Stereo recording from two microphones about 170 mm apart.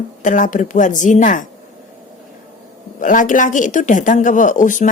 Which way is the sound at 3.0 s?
50° left (ahead or behind).